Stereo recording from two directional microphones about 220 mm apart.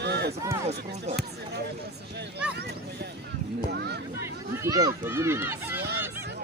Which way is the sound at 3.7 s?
50° right (ahead or behind).